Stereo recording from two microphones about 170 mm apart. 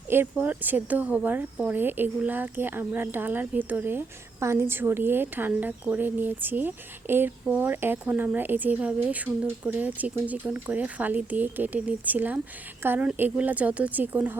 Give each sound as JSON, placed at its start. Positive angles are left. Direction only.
{"t": 0.1, "sound": "speech", "side_deg": -10}